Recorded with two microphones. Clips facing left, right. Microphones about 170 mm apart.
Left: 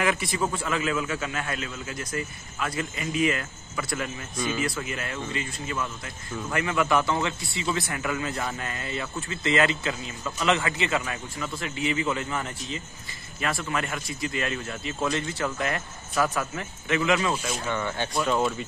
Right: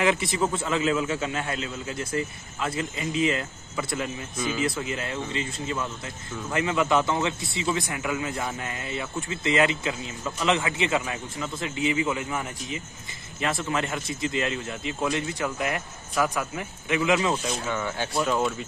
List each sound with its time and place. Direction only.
0.0 s a man's voice: 25° right (ahead or behind)
13.4 s speech: 20° right (ahead or behind)
17.6 s speech: 5° right (ahead or behind)